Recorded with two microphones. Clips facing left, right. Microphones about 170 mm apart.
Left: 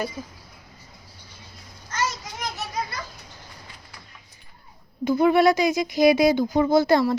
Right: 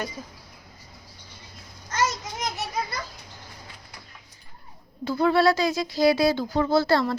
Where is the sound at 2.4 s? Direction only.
20° right (ahead or behind).